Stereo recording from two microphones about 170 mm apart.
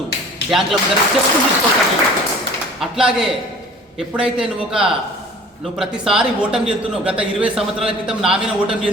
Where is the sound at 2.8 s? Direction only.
5° right (ahead or behind).